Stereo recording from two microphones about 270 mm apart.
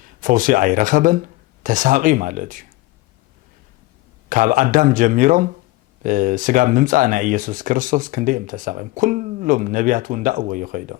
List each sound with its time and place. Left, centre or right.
0.0 s speech: right
4.3 s speech: right